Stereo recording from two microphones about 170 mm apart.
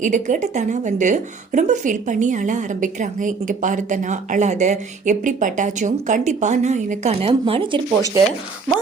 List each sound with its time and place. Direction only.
0.0 s a woman's voice: 45° right (ahead or behind); by 8.1 s 30° right (ahead or behind)